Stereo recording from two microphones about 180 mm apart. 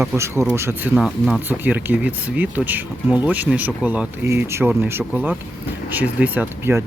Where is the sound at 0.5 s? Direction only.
15° right (ahead or behind).